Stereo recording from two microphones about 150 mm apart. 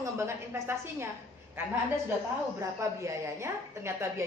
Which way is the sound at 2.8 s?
20° right (ahead or behind).